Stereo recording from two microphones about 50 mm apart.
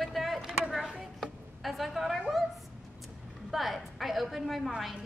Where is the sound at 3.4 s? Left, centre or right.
Centre.